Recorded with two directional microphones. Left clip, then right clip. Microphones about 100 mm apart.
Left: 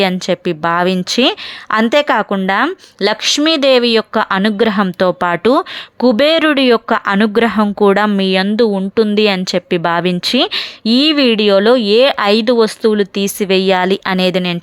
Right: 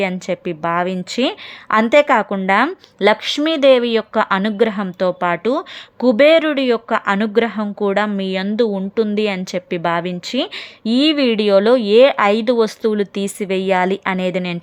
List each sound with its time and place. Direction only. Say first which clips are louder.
0.0 s a woman's voice: left 6 dB; 35° left (ahead or behind)
1.7 s a woman's voice: even; 15° left (ahead or behind)
2.1 s a woman's voice: left 1 dB; 30° left (ahead or behind)